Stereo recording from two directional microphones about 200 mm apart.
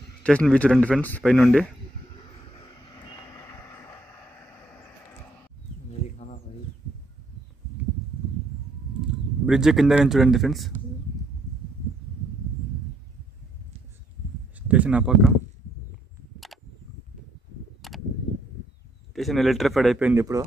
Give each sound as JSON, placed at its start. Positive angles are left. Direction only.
{"t": 0.2, "sound": "speech", "side_deg": 5}
{"t": 5.9, "sound": "a sound", "side_deg": 35}
{"t": 9.5, "sound": "speech", "side_deg": 0}
{"t": 14.7, "sound": "speech", "side_deg": -5}
{"t": 17.8, "sound": "a sound", "side_deg": 0}
{"t": 19.1, "sound": "speech", "side_deg": 0}